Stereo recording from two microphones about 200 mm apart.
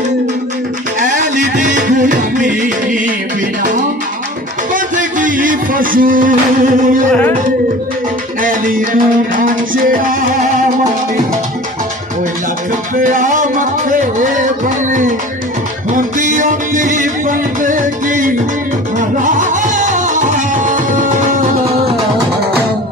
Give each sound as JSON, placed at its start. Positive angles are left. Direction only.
{"t": 0.9, "sound": "music", "side_deg": -40}
{"t": 4.7, "sound": "speech", "side_deg": -40}
{"t": 7.1, "sound": "music", "side_deg": 10}
{"t": 8.4, "sound": "music", "side_deg": -45}
{"t": 12.9, "sound": "music", "side_deg": -40}